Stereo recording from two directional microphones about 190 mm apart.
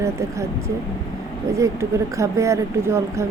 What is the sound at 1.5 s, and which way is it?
Speech, 15° right (ahead or behind).